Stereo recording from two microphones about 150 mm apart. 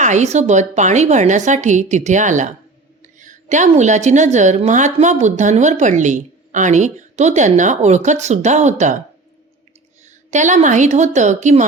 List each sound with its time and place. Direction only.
0.0 s a woman's voice: 50° right (ahead or behind)
10.3 s a woman's voice: 55° right (ahead or behind)